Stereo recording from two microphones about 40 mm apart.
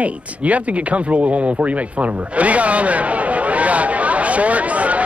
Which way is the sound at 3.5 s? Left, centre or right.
Right.